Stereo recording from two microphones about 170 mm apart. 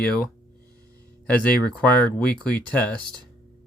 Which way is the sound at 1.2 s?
5° left (ahead or behind).